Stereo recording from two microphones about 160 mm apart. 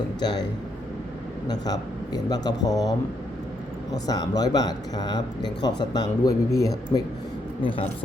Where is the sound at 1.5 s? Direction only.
25° left (ahead or behind).